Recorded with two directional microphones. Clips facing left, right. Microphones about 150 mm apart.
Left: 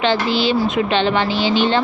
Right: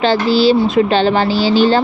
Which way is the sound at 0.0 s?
35° right (ahead or behind).